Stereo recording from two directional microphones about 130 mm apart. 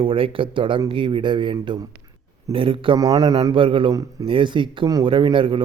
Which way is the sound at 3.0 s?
30° right (ahead or behind).